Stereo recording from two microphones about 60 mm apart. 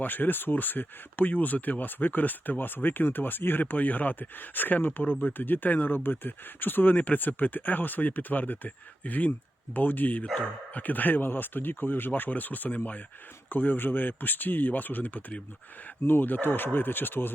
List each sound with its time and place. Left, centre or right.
0.0 s speech: left